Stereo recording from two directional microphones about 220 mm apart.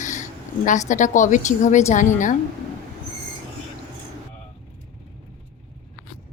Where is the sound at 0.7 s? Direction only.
35° left (ahead or behind).